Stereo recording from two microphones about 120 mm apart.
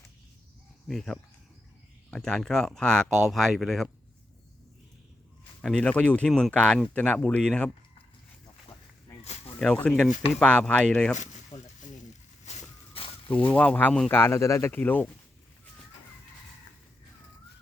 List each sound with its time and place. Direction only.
0.9 s speech: 5° left (ahead or behind)
5.6 s speech: 5° left (ahead or behind)
9.6 s speech: 5° left (ahead or behind)
11.2 s a sound: 85° left
12.5 s vehicle: 50° left (ahead or behind)
13.3 s speech: 10° left (ahead or behind)